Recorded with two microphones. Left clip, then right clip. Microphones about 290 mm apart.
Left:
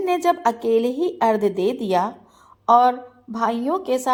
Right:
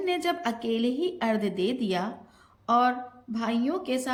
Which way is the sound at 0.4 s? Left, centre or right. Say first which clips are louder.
Left 11 dB; left.